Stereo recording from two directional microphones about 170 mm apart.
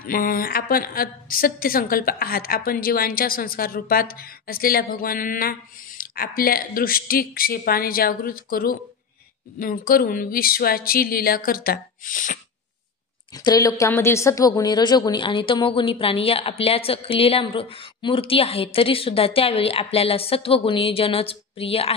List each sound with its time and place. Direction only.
0.0 s a woman's voice: 55° left (ahead or behind)
13.3 s a woman's voice: 20° left (ahead or behind)